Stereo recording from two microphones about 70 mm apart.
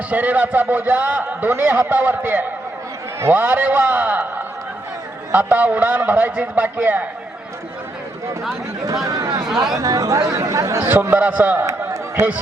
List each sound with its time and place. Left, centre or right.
0.1 s a man's voice: right
9.0 s speech: right
10.3 s speech: right
11.1 s a man's voice: right
11.8 s chatter: right